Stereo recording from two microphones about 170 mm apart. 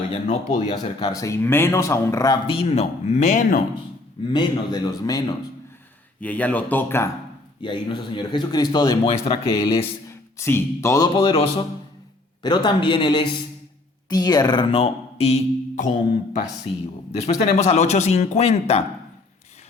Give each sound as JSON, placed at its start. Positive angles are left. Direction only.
{"t": 0.3, "sound": "speech", "side_deg": 45}
{"t": 0.7, "sound": "a man's voice", "side_deg": 25}
{"t": 4.3, "sound": "a man's voice", "side_deg": 25}
{"t": 6.1, "sound": "speech", "side_deg": 10}
{"t": 7.6, "sound": "a man's voice", "side_deg": 30}
{"t": 9.1, "sound": "a man's voice", "side_deg": 35}
{"t": 10.1, "sound": "a man's voice", "side_deg": 15}
{"t": 17.1, "sound": "a man's voice", "side_deg": 40}